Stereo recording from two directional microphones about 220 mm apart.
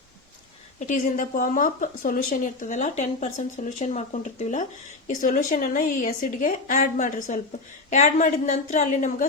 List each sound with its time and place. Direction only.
0.8 s speech: 35° left (ahead or behind)